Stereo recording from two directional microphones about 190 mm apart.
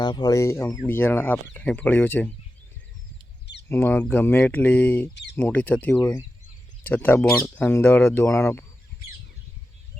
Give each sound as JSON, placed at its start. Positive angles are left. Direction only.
{"t": 0.0, "sound": "speech", "side_deg": 20}
{"t": 3.7, "sound": "speech", "side_deg": 10}